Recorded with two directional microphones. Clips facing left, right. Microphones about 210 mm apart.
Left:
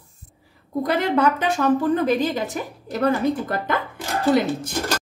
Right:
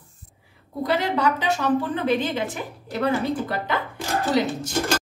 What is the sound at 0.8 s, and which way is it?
A woman's voice, 50° left (ahead or behind).